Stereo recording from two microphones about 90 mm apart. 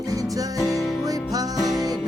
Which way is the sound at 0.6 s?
Centre (ahead or behind).